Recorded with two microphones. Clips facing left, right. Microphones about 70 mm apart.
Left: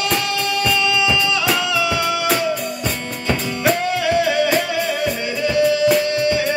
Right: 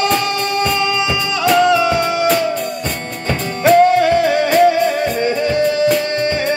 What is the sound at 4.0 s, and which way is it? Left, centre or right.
Music, right.